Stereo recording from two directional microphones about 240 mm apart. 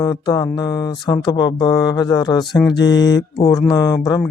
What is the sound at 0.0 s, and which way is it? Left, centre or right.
Speech, centre.